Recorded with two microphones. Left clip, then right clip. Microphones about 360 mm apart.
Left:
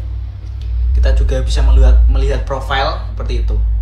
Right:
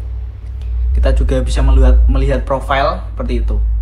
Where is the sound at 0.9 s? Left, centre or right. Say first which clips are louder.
Right 4 dB; centre.